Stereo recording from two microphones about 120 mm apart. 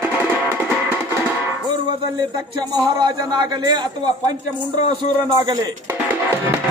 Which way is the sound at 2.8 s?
35° right (ahead or behind).